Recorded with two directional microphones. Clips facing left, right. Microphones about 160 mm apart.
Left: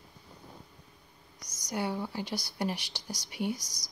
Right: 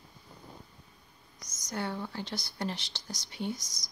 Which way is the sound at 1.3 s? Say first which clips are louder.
Left 2 dB; 10° left (ahead or behind).